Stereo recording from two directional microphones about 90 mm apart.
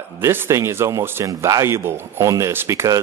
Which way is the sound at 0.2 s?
25° right (ahead or behind).